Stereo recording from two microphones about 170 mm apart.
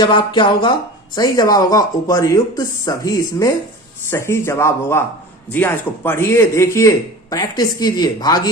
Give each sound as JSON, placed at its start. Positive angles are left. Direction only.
{"t": 0.0, "sound": "speech", "side_deg": 30}